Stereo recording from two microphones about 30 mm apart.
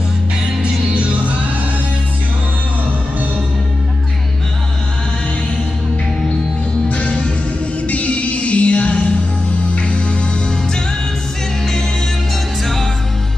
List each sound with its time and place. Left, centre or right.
0.6 s music: right
6.9 s music: left